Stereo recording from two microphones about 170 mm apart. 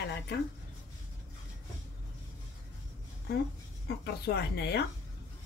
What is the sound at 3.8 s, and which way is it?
Speech, 70° left (ahead or behind).